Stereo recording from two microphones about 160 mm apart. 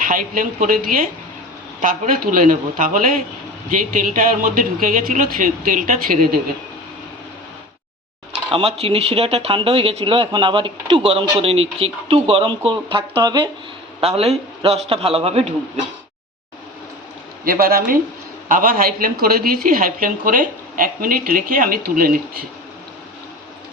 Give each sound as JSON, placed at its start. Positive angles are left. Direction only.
{"t": 0.0, "sound": "a woman's voice", "side_deg": -55}
{"t": 8.4, "sound": "speech", "side_deg": -35}
{"t": 14.0, "sound": "speech", "side_deg": -40}
{"t": 17.4, "sound": "a woman's voice", "side_deg": -65}